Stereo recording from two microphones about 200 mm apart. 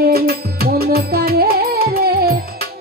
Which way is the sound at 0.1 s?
50° right (ahead or behind).